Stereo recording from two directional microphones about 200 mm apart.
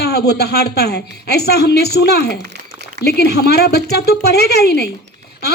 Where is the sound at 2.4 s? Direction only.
55° right (ahead or behind).